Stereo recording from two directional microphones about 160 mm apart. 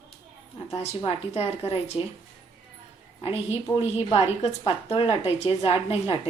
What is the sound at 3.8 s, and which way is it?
A woman's voice, 35° left (ahead or behind).